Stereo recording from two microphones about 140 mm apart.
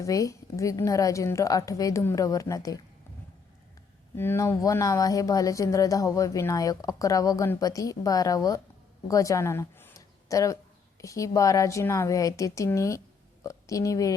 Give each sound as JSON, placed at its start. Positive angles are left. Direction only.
{"t": 0.0, "sound": "speech", "side_deg": 25}
{"t": 4.1, "sound": "speech", "side_deg": 15}